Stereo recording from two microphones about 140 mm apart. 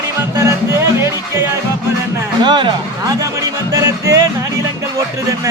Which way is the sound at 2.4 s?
35° right (ahead or behind).